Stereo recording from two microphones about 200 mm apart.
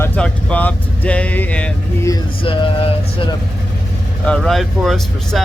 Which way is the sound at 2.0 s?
25° left (ahead or behind).